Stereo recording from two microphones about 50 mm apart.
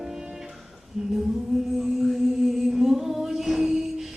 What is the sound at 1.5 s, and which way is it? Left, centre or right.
Music, centre.